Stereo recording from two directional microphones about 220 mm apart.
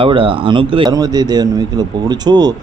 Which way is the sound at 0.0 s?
25° right (ahead or behind).